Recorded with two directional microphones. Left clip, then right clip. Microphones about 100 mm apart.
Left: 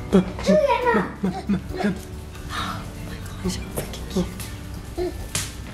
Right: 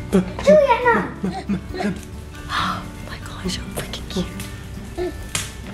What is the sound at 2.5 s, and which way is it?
Music, 20° right (ahead or behind).